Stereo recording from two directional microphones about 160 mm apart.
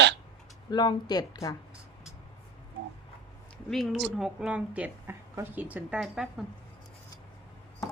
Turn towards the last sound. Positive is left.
turn(degrees=-5)  # may be behind; listen again after turning